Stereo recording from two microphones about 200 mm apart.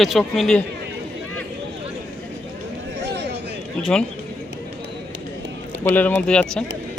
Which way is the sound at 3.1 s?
60° right (ahead or behind).